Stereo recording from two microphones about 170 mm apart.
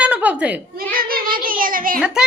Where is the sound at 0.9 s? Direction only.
55° right (ahead or behind).